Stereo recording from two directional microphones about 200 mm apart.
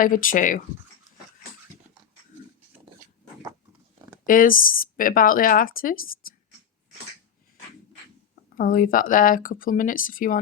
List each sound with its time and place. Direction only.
0.0 s speech: 45° left (ahead or behind)
3.9 s a sound: 15° right (ahead or behind)
4.3 s speech: 45° left (ahead or behind)
8.5 s speech: 45° left (ahead or behind)